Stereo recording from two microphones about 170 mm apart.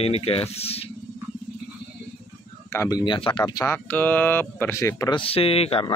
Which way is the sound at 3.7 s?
10° left (ahead or behind).